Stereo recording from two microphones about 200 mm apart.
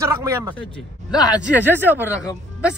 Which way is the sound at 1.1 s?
20° left (ahead or behind).